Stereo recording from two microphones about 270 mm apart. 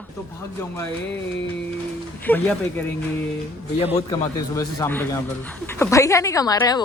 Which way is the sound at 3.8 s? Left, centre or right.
Left.